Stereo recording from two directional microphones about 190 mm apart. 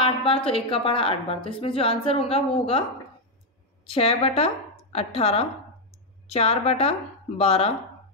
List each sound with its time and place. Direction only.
0.0 s a woman's voice: 30° left (ahead or behind)
3.8 s a woman's voice: 30° left (ahead or behind)